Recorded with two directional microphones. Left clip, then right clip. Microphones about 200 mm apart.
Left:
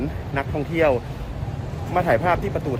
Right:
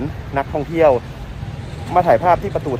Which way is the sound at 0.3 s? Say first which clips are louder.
Right 5 dB; 5° right (ahead or behind).